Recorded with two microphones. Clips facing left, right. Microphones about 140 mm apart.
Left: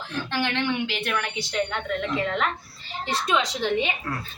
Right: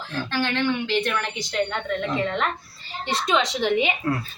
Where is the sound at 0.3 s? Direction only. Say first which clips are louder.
Right 2 dB; 15° left (ahead or behind).